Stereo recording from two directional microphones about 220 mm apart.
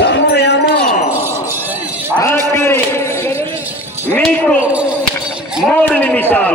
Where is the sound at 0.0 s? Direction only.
50° left (ahead or behind).